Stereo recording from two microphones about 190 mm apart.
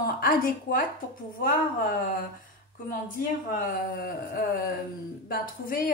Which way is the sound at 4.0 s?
50° left (ahead or behind).